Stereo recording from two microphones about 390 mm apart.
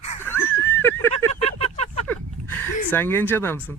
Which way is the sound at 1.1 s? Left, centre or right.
Centre.